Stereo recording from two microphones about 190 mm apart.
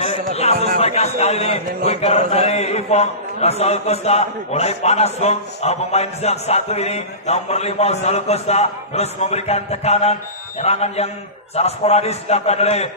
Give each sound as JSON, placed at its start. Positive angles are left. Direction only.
{"t": 0.3, "sound": "a man's voice", "side_deg": 35}